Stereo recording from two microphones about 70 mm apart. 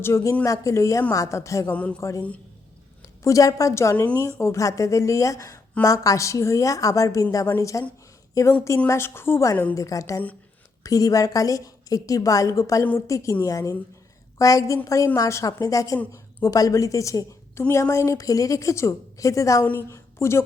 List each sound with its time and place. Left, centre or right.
0.0 s a woman's voice: left
1.7 s speech: centre
2.0 s a woman's voice: left
3.2 s a woman's voice: left
8.9 s speech: left
9.7 s a woman's voice: left
19.9 s a sound: left